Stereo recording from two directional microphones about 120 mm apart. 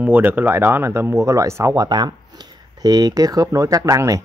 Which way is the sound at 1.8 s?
35° right (ahead or behind).